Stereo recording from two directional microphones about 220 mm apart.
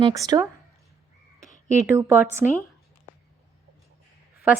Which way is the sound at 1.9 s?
10° right (ahead or behind).